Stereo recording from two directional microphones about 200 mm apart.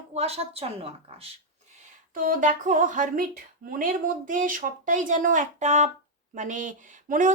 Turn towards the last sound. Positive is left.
turn(degrees=-40)  # may be behind; listen again after turning